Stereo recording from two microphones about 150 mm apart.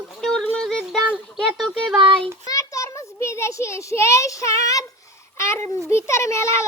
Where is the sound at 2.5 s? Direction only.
20° left (ahead or behind).